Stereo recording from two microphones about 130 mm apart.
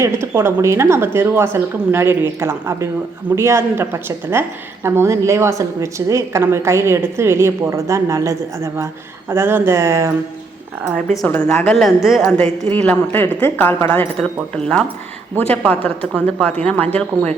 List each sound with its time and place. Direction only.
0.0 s a woman's voice: 20° right (ahead or behind)
11.3 s speech: 10° left (ahead or behind)
12.0 s a woman's voice: centre (ahead or behind)
12.7 s speech: 10° left (ahead or behind)